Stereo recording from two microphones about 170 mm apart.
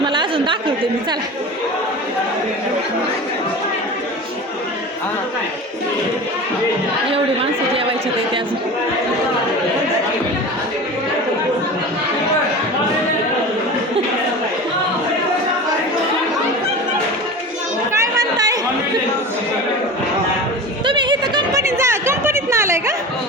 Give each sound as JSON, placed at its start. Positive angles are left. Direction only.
{"t": 0.0, "sound": "chatter", "side_deg": -30}
{"t": 17.9, "sound": "chatter", "side_deg": -20}
{"t": 20.8, "sound": "a sound", "side_deg": -30}